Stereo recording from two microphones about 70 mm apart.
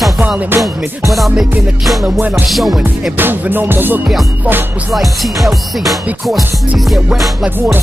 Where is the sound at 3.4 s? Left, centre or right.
Right.